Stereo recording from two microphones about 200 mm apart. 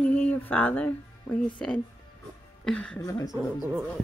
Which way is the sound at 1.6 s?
Centre (ahead or behind).